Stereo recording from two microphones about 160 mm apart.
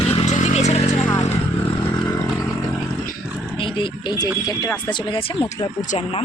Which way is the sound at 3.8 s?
25° left (ahead or behind).